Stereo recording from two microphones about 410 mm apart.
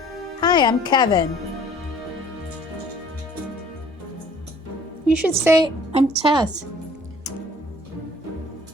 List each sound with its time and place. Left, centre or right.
0.3 s speech: centre
5.0 s a woman's voice: centre